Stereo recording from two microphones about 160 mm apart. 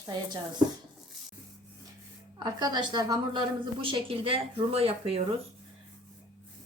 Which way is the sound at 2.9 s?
25° right (ahead or behind).